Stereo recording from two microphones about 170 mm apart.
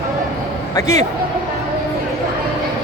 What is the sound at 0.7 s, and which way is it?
Speech, 20° left (ahead or behind).